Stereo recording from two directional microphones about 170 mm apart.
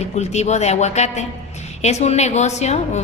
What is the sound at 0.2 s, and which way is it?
A woman's voice, 40° left (ahead or behind).